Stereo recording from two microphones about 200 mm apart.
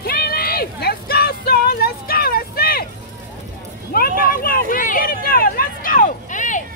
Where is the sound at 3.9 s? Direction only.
50° left (ahead or behind).